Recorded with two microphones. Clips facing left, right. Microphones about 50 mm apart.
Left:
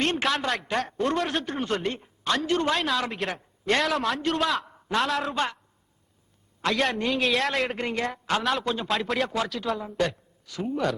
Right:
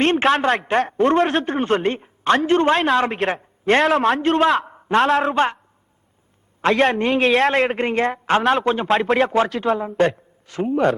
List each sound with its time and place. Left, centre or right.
0.0 s speech: right
6.6 s speech: right